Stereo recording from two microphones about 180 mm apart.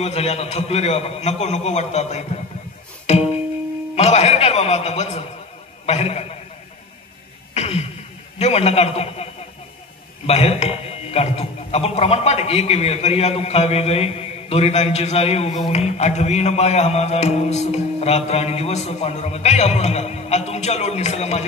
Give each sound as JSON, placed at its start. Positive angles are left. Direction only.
{"t": 0.0, "sound": "a man's voice", "side_deg": 35}
{"t": 3.1, "sound": "music", "side_deg": 35}
{"t": 3.9, "sound": "a man's voice", "side_deg": 35}
{"t": 7.5, "sound": "a sound", "side_deg": 35}
{"t": 8.4, "sound": "a man's voice", "side_deg": 35}